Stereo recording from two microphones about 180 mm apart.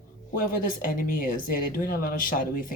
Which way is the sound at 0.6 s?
50° left (ahead or behind).